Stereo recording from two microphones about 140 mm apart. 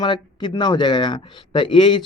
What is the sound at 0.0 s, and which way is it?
Speech, 35° left (ahead or behind).